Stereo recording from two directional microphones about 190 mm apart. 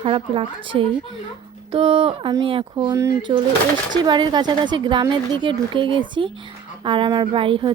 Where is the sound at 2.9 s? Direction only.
15° right (ahead or behind).